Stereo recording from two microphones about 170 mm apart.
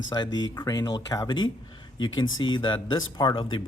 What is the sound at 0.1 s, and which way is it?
Speech, 25° left (ahead or behind).